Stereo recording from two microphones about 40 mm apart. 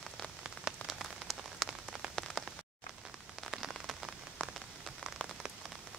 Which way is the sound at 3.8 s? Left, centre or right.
Centre.